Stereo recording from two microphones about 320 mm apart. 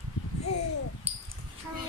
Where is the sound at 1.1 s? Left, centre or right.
Centre.